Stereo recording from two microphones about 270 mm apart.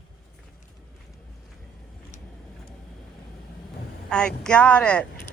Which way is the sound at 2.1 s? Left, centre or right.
Left.